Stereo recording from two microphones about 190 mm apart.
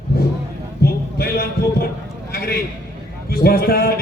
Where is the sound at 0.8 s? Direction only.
55° left (ahead or behind).